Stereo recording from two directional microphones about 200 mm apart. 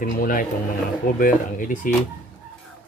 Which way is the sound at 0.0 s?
40° left (ahead or behind).